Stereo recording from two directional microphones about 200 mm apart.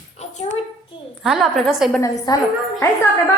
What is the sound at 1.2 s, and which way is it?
Speech, centre (ahead or behind).